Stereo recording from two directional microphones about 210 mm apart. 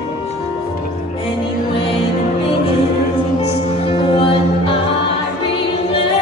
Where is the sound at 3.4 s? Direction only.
25° left (ahead or behind).